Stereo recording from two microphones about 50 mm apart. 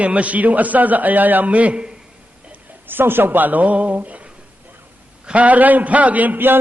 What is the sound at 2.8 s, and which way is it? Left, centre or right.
A man's voice, right.